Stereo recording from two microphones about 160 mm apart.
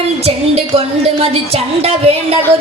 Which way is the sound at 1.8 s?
40° right (ahead or behind).